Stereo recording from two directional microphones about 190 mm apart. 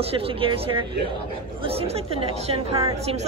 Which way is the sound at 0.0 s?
30° right (ahead or behind).